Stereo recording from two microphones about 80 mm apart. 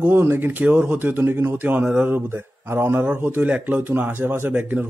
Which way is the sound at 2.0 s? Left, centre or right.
Right.